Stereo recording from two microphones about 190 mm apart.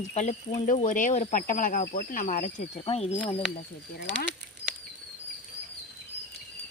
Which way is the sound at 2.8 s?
30° left (ahead or behind).